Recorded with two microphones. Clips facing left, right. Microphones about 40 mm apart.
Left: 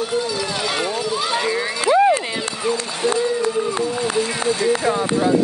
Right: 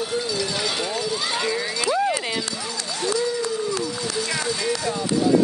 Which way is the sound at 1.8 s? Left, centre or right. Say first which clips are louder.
Left 9 dB; left.